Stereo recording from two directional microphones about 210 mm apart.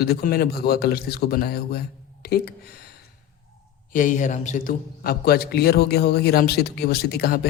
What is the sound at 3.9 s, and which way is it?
A man's voice, 35° left (ahead or behind).